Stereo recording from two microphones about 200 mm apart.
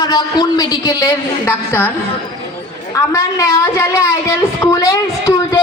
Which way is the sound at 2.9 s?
15° left (ahead or behind).